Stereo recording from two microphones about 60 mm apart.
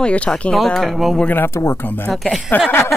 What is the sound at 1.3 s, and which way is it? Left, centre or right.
Speech, left.